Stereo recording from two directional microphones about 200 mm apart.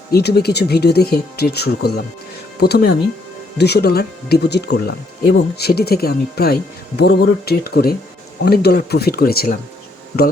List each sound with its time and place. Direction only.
0.1 s speech: 55° left (ahead or behind)